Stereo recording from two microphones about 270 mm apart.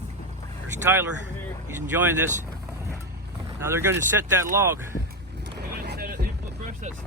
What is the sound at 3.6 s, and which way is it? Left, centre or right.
Speech, centre.